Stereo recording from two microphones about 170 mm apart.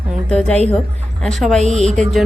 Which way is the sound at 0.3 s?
5° left (ahead or behind).